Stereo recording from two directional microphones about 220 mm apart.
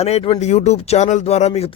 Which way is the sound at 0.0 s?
25° left (ahead or behind).